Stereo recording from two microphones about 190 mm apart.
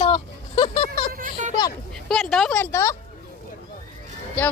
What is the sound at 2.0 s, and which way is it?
Speech, centre (ahead or behind).